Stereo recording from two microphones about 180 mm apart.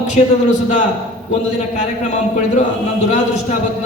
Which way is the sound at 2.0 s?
40° left (ahead or behind).